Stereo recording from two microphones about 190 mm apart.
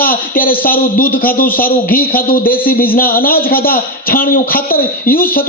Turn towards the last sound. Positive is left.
turn(degrees=50)  # may be behind; listen again after turning